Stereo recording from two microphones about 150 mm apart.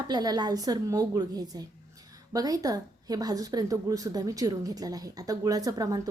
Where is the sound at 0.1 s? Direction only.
25° right (ahead or behind).